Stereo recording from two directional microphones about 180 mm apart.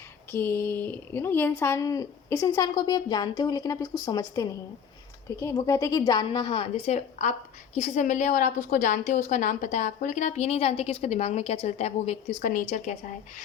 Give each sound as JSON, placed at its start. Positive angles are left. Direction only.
{"t": 0.3, "sound": "a woman's voice", "side_deg": 10}